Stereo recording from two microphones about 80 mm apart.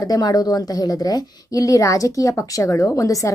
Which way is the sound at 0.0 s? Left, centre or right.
Left.